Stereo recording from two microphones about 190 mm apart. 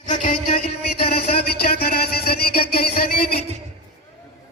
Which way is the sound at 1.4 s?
55° left (ahead or behind).